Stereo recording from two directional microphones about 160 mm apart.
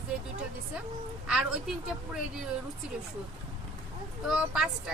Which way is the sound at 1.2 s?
5° right (ahead or behind).